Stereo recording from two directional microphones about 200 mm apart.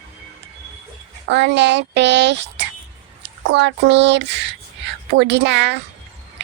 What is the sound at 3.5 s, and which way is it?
Speech, 60° right (ahead or behind).